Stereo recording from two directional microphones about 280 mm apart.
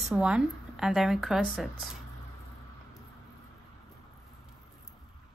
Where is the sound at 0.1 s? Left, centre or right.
Centre.